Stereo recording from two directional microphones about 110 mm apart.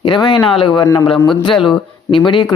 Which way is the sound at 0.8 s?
30° left (ahead or behind).